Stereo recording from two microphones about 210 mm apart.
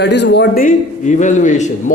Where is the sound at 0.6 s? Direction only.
35° left (ahead or behind).